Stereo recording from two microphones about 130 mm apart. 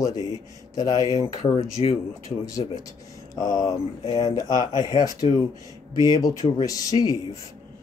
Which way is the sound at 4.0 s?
45° left (ahead or behind).